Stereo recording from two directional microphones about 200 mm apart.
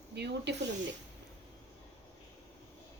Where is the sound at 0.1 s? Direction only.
55° right (ahead or behind).